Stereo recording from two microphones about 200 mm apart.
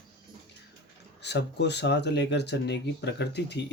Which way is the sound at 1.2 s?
60° left (ahead or behind).